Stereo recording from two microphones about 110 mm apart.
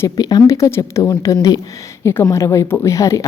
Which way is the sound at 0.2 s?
35° left (ahead or behind).